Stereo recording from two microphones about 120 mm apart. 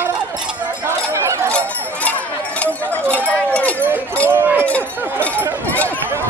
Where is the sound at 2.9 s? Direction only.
10° left (ahead or behind).